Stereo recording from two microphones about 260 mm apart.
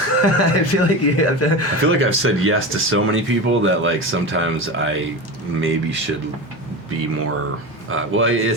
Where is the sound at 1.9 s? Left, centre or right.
Right.